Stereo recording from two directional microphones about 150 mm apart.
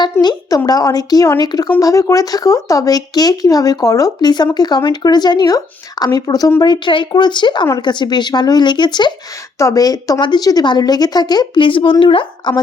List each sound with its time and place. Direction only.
0.0 s speech: 30° left (ahead or behind)